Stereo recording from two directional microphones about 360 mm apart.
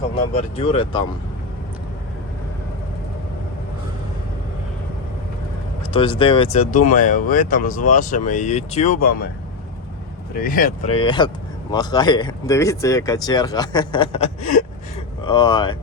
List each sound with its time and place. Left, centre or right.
0.3 s speech: centre
5.9 s speech: centre
10.3 s speech: left